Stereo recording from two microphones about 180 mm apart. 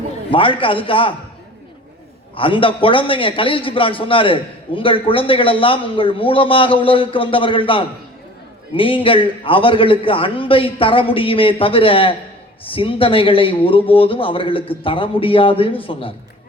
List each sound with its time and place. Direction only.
0.3 s a man's voice: 30° left (ahead or behind)
2.3 s a man's voice: 30° left (ahead or behind)